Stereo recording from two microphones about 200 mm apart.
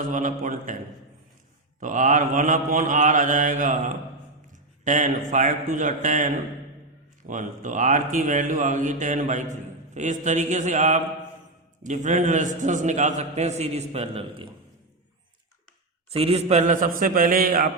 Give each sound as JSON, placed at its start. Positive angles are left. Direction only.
{"t": 0.0, "sound": "a man's voice", "side_deg": -40}
{"t": 1.8, "sound": "a man's voice", "side_deg": -40}
{"t": 16.0, "sound": "a man's voice", "side_deg": -30}